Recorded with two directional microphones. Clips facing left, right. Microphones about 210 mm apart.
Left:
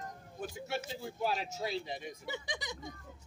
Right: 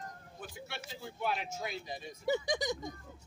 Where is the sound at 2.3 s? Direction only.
40° right (ahead or behind).